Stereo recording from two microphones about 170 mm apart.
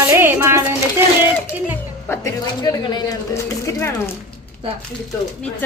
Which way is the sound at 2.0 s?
20° left (ahead or behind).